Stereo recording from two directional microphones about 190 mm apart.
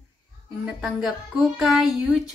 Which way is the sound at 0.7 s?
5° right (ahead or behind).